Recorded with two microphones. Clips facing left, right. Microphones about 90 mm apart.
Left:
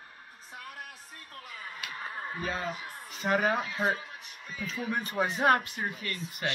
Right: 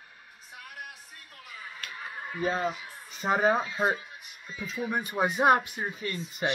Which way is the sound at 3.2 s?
20° right (ahead or behind).